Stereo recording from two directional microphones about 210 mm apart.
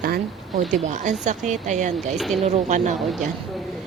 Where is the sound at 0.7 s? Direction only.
35° right (ahead or behind).